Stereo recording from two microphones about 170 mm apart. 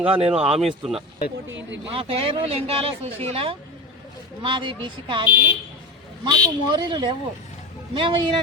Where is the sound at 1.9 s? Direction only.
35° right (ahead or behind).